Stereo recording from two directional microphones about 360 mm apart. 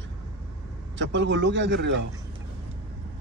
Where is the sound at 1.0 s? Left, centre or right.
Right.